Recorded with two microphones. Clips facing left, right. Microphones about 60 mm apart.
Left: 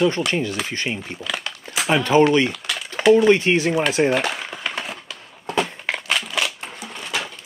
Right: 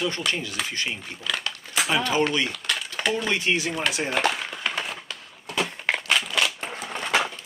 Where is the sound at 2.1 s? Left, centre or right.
Left.